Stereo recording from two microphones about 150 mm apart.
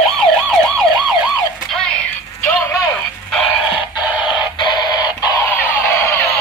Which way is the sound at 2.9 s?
5° left (ahead or behind).